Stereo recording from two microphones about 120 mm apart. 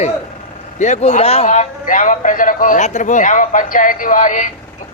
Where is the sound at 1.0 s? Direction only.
55° left (ahead or behind).